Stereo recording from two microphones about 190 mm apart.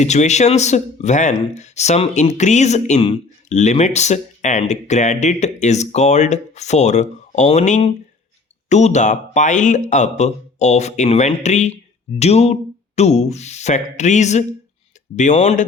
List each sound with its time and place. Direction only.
0.0 s speech: 35° left (ahead or behind)